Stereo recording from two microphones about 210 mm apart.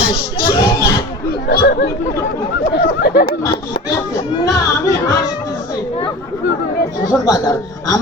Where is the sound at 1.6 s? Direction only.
50° left (ahead or behind).